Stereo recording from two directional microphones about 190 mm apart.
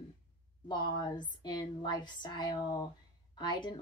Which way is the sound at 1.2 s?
25° left (ahead or behind).